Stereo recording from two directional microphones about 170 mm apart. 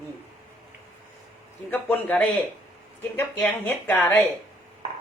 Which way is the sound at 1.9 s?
5° left (ahead or behind).